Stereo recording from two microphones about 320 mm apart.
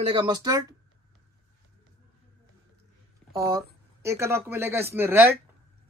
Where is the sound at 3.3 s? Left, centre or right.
Centre.